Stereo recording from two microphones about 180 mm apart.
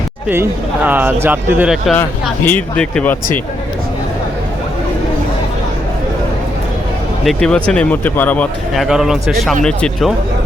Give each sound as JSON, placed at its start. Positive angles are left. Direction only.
{"t": 0.3, "sound": "speech", "side_deg": -10}
{"t": 2.4, "sound": "speech", "side_deg": 10}
{"t": 7.3, "sound": "a man's voice", "side_deg": 5}